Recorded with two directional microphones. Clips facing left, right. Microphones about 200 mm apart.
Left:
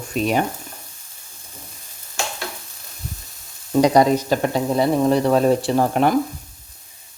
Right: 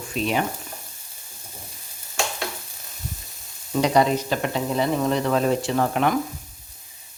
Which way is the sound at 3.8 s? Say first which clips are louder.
Left 4 dB; 40° left (ahead or behind).